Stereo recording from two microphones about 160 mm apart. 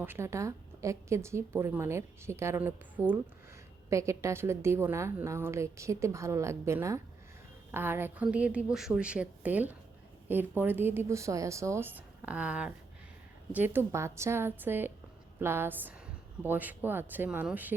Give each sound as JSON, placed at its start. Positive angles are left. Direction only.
{"t": 0.0, "sound": "a woman's voice", "side_deg": -15}